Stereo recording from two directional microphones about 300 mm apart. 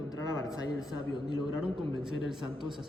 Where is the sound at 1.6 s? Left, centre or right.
Centre.